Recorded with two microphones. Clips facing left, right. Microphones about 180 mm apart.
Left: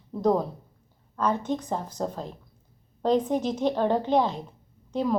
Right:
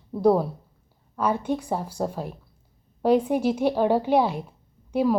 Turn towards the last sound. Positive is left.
turn(degrees=-10)  # may be behind; listen again after turning